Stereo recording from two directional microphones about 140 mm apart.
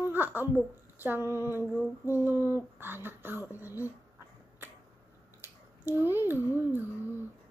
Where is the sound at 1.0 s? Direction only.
15° right (ahead or behind).